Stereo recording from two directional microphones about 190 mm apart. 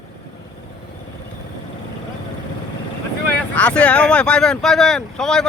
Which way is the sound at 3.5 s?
5° left (ahead or behind).